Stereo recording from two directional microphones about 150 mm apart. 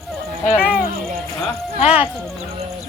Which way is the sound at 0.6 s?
5° right (ahead or behind).